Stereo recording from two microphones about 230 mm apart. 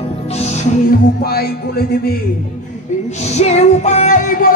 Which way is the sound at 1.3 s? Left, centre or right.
Left.